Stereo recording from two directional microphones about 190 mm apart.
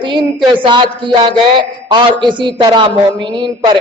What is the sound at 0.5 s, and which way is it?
A man's voice, 25° right (ahead or behind).